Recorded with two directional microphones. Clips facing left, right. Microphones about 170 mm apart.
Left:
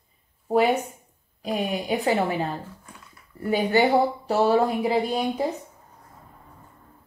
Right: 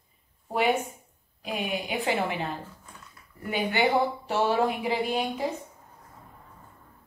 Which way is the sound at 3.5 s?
35° left (ahead or behind).